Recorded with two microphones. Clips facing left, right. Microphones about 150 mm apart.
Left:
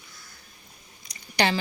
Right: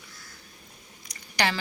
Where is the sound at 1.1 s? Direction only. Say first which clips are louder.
Left 3 dB; 20° left (ahead or behind).